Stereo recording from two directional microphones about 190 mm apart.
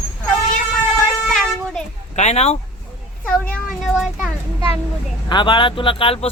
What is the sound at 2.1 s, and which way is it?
Speech, 35° left (ahead or behind).